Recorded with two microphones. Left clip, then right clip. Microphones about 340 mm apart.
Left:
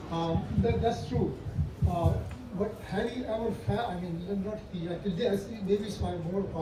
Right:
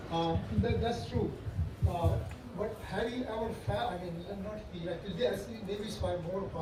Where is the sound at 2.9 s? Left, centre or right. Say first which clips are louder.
Left 2 dB; centre.